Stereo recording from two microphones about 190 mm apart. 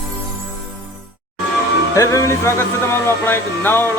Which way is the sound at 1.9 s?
15° left (ahead or behind).